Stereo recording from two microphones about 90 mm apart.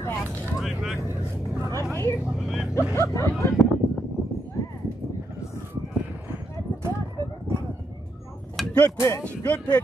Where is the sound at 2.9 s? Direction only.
35° left (ahead or behind).